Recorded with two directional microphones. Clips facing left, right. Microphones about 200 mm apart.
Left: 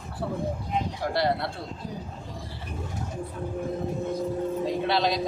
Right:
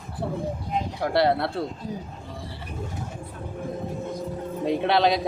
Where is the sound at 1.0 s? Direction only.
50° right (ahead or behind).